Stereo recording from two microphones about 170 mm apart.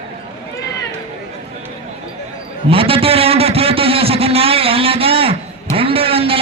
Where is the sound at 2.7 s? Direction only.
35° right (ahead or behind).